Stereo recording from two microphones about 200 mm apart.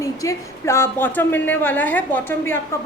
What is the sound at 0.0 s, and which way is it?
A woman's voice, 15° left (ahead or behind).